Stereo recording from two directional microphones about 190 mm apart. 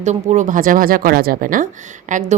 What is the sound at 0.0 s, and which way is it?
A woman's voice, 35° right (ahead or behind).